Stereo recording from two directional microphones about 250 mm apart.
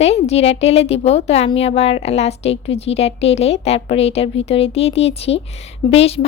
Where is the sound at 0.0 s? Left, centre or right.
Left.